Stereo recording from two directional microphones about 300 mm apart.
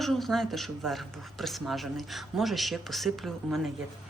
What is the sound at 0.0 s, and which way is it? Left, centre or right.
Speech, centre.